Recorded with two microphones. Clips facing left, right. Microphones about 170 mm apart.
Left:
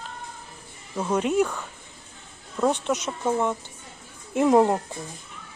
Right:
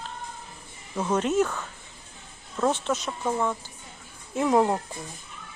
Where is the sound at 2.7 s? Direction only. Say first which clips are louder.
Left 2 dB; 15° left (ahead or behind).